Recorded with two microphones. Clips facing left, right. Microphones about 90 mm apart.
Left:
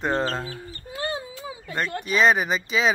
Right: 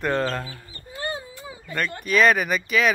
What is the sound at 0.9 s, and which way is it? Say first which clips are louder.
Dog: left 1 dB; 90° left.